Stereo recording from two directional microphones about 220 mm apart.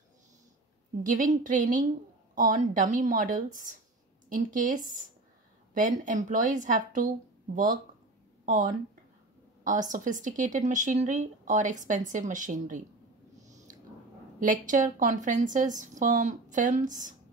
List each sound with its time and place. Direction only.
1.0 s a woman's voice: 35° right (ahead or behind)
13.5 s a sound: 35° right (ahead or behind)
14.4 s a woman's voice: 35° right (ahead or behind)